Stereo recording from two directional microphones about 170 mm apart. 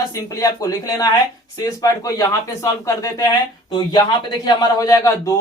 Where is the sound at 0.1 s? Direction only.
20° left (ahead or behind).